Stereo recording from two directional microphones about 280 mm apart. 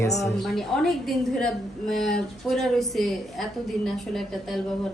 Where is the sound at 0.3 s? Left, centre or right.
Centre.